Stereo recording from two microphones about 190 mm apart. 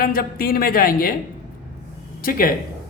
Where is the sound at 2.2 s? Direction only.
50° left (ahead or behind).